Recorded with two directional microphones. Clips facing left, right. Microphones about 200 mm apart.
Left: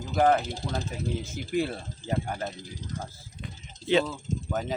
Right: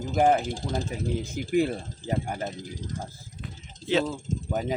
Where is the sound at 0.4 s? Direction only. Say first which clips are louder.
Right 3 dB; 45° right (ahead or behind).